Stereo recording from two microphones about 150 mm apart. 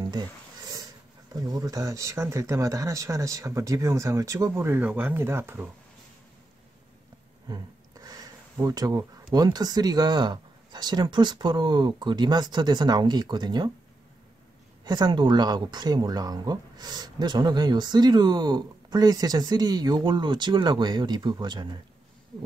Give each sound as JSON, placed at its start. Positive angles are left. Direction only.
{"t": 0.7, "sound": "speech", "side_deg": -25}
{"t": 7.4, "sound": "a sound", "side_deg": -25}
{"t": 8.5, "sound": "speech", "side_deg": -25}
{"t": 14.9, "sound": "speech", "side_deg": -30}